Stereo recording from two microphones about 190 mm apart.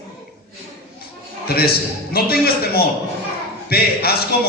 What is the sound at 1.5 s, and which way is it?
A man's voice, 55° left (ahead or behind).